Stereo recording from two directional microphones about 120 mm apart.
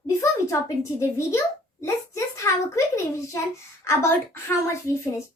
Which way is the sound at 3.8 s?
25° left (ahead or behind).